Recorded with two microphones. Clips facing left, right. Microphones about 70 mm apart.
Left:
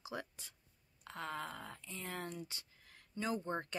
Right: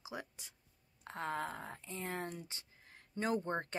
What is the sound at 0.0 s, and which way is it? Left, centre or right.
Speech, centre.